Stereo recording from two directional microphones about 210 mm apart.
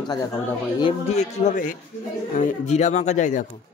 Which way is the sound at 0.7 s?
25° left (ahead or behind).